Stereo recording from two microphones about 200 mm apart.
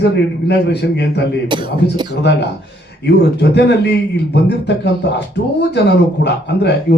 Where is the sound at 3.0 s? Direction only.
60° left (ahead or behind).